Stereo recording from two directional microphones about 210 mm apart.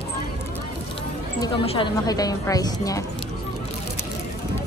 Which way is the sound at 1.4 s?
25° left (ahead or behind).